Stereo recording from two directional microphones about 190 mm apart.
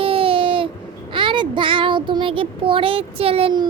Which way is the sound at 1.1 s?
25° right (ahead or behind).